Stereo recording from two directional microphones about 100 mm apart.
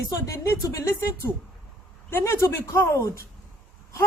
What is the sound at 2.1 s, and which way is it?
Speech, 25° left (ahead or behind).